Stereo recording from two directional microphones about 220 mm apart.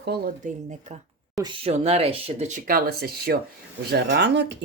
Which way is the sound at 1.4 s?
20° right (ahead or behind).